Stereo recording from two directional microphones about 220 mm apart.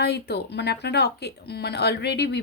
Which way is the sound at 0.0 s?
50° left (ahead or behind).